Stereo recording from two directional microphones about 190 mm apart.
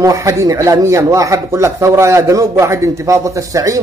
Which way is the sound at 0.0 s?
15° right (ahead or behind).